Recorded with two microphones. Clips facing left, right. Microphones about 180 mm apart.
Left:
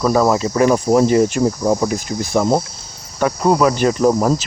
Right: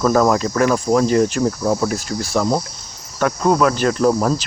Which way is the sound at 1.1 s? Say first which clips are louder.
Left 2 dB; 10° left (ahead or behind).